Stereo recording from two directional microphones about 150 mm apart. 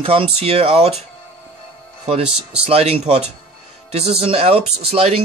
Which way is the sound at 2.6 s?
40° right (ahead or behind).